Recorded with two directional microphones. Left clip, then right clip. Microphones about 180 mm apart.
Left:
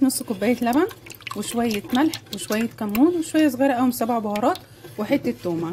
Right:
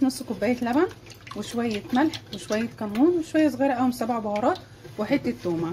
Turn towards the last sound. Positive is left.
turn(degrees=20)  # may be behind; listen again after turning